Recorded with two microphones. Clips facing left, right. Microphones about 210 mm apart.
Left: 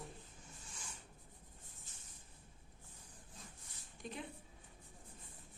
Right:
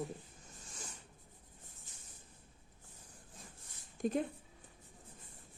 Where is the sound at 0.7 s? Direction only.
40° right (ahead or behind).